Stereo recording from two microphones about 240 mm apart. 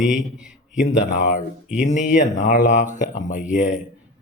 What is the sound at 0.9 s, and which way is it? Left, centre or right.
Speech, left.